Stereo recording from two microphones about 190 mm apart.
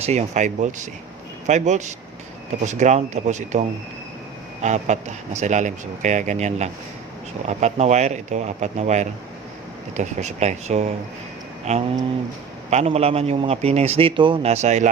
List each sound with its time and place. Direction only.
0.0 s a man's voice: 35° right (ahead or behind)
4.6 s a man's voice: 40° right (ahead or behind)